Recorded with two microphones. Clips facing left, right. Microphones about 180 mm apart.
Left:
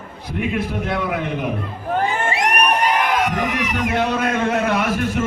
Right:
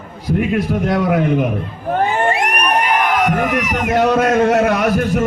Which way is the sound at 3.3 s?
60° right (ahead or behind).